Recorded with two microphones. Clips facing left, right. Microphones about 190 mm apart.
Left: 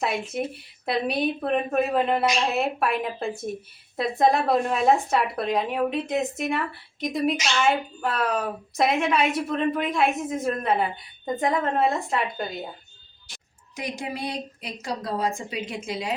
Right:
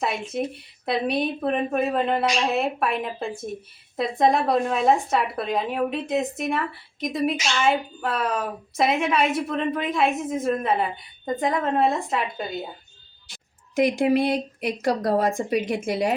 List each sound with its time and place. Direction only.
0.0 s speech: centre (ahead or behind)
13.7 s speech: 55° right (ahead or behind)